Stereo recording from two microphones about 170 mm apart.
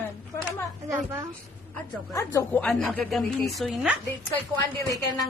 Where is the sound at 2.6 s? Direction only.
Centre (ahead or behind).